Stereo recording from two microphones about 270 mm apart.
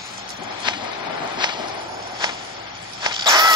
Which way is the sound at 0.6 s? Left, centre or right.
Centre.